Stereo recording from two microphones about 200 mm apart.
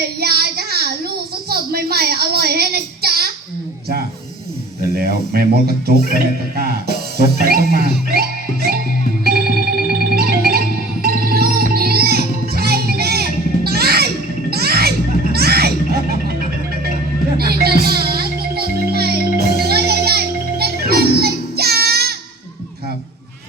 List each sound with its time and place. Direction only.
0.2 s child singing: 50° right (ahead or behind)
1.5 s speech: 50° right (ahead or behind)
4.9 s speech: 50° right (ahead or behind)
10.0 s music: 50° right (ahead or behind)
17.3 s music: 50° right (ahead or behind)